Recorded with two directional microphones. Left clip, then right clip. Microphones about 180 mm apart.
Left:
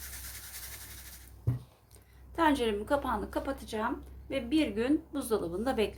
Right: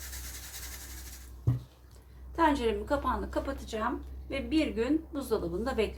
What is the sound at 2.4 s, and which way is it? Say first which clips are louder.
A woman's voice: right 1 dB; 45° left (ahead or behind).